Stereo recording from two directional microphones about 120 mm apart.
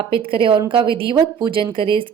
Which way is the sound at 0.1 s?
45° right (ahead or behind).